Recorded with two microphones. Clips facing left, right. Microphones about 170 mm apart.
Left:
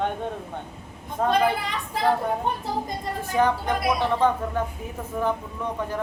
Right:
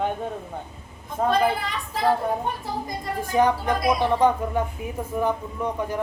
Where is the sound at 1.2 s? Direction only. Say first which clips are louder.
Right 1 dB; 5° right (ahead or behind).